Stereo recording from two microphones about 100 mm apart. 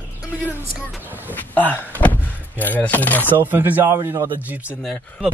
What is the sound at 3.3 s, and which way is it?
Speech, 20° right (ahead or behind).